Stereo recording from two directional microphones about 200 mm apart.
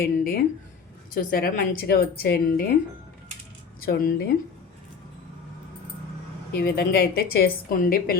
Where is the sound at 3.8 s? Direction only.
50° left (ahead or behind).